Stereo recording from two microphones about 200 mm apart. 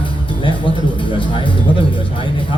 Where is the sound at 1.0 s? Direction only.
25° left (ahead or behind).